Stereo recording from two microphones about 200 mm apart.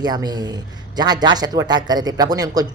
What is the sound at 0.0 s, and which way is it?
A woman's voice, 20° right (ahead or behind).